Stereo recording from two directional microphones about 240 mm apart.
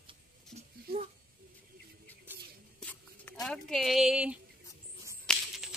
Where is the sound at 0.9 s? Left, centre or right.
Right.